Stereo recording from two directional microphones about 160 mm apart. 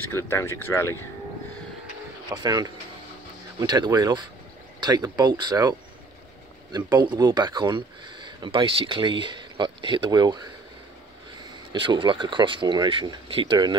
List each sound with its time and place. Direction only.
0.1 s speech: 15° left (ahead or behind)
2.3 s speech: 25° right (ahead or behind)
11.7 s speech: 30° right (ahead or behind)